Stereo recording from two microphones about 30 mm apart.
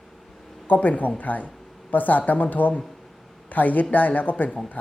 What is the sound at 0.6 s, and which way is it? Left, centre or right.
Speech, left.